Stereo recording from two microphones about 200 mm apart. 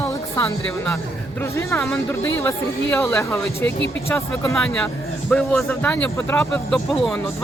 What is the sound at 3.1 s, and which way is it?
Speech, 15° left (ahead or behind).